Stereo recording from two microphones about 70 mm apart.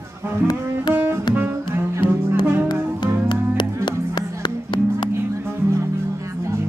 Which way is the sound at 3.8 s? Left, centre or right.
Left.